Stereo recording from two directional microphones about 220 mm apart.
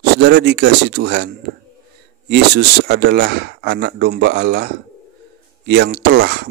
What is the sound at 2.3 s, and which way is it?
Speech, 50° right (ahead or behind).